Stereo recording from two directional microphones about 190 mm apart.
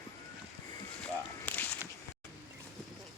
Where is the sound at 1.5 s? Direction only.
10° left (ahead or behind).